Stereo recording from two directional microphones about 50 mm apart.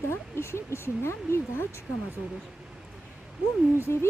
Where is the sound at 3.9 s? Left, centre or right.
Left.